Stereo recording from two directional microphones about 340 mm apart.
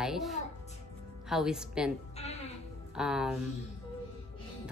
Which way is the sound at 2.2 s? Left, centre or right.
Centre.